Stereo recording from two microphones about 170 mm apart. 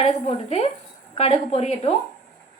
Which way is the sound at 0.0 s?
35° left (ahead or behind).